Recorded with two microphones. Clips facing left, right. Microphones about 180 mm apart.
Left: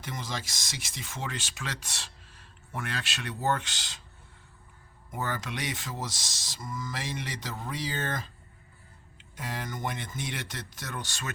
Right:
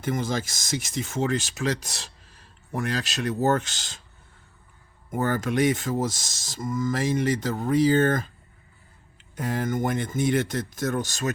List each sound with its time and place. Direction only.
0.0 s speech: 50° right (ahead or behind)
5.1 s speech: 50° right (ahead or behind)
9.3 s speech: 50° right (ahead or behind)